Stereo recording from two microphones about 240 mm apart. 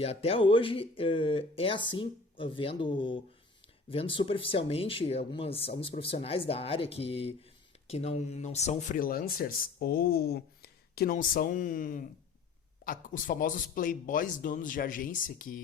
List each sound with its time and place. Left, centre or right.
0.0 s speech: left